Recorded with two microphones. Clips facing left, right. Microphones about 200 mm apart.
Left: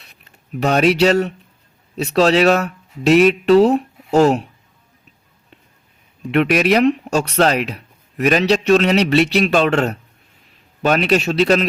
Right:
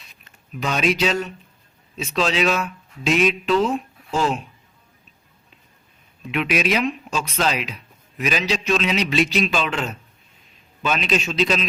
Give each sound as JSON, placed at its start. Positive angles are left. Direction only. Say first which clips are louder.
{"t": 0.5, "sound": "speech", "louder": "left 7 dB", "side_deg": 60}
{"t": 6.3, "sound": "speech", "louder": "left 7 dB", "side_deg": 60}